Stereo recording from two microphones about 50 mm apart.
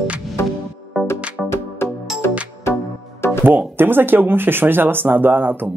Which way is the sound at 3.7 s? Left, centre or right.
Right.